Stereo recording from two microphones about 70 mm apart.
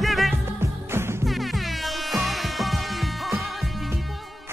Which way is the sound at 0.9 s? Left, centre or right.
Right.